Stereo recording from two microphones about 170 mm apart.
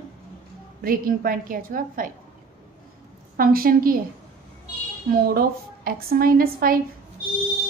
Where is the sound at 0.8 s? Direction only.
60° right (ahead or behind).